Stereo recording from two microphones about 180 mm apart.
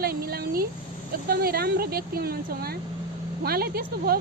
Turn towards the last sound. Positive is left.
turn(degrees=-60)  # may be behind; listen again after turning